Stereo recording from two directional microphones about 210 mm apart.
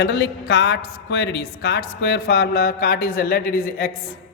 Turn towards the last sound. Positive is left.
turn(degrees=45)  # may be behind; listen again after turning